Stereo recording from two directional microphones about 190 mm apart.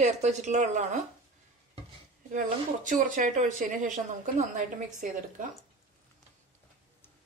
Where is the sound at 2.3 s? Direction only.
40° right (ahead or behind).